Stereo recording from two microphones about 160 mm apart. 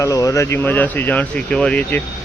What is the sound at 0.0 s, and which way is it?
Speech, 20° left (ahead or behind).